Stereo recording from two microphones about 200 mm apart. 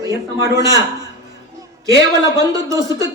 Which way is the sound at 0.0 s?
15° right (ahead or behind).